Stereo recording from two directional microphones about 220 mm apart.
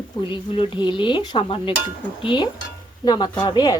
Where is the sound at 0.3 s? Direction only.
25° left (ahead or behind).